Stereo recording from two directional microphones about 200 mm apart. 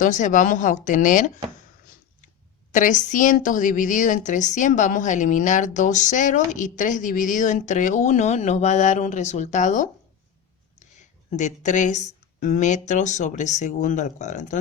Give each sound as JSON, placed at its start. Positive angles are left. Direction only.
{"t": 0.0, "sound": "a woman's voice", "side_deg": 40}
{"t": 2.7, "sound": "a woman's voice", "side_deg": 40}